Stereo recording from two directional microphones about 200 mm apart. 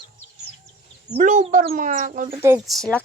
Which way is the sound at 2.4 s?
10° right (ahead or behind).